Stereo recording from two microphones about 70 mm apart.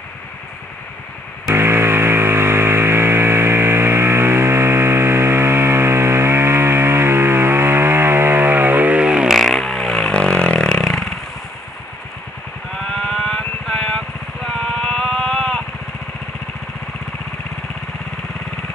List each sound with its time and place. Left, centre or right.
1.5 s music: right; by 9.3 s centre
9.3 s vehicle: centre
12.9 s vehicle: centre